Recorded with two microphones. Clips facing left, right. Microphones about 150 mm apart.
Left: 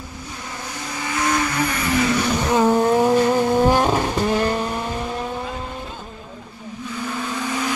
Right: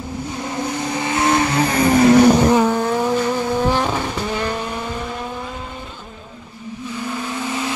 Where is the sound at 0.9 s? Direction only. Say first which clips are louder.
Right 4 dB; 25° right (ahead or behind); by 2.3 s 45° right (ahead or behind).